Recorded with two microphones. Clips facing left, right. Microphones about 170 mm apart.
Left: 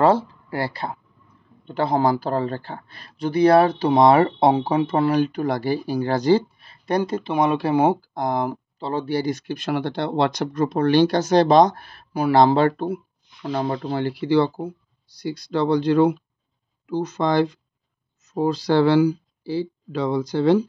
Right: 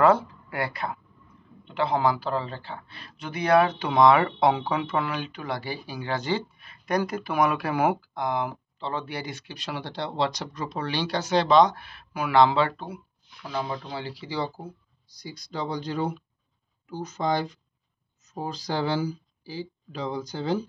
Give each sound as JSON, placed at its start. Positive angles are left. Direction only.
{"t": 0.0, "sound": "speech", "side_deg": 30}
{"t": 8.1, "sound": "speech", "side_deg": 40}